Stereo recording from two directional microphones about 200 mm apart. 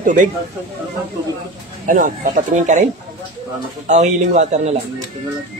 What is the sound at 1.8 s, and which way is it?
Speech, 40° right (ahead or behind).